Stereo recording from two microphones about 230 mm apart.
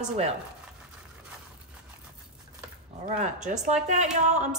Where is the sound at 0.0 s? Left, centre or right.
Right.